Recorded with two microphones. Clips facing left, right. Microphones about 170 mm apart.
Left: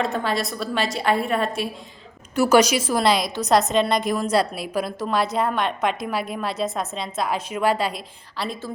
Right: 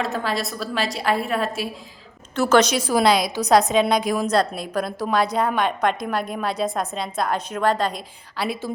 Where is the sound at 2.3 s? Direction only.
10° left (ahead or behind).